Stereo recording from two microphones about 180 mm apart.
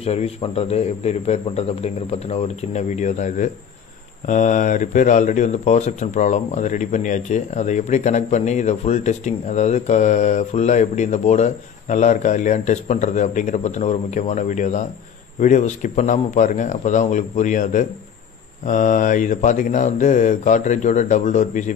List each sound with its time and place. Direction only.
0.0 s speech: 35° left (ahead or behind)